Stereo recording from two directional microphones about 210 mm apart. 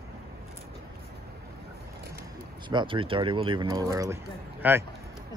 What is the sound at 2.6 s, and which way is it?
Speech, 25° right (ahead or behind).